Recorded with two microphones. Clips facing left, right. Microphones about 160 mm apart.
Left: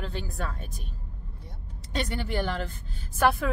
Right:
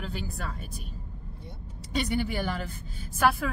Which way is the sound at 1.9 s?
10° right (ahead or behind).